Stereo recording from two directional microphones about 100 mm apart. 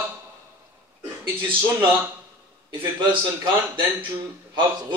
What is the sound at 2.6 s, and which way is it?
Speech, 45° right (ahead or behind).